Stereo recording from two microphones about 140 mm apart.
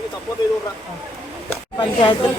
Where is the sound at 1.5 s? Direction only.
30° left (ahead or behind).